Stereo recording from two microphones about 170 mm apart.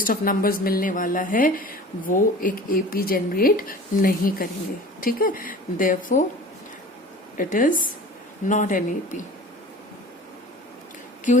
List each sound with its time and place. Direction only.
0.0 s a woman's voice: 55° left (ahead or behind)
7.3 s a woman's voice: 50° left (ahead or behind)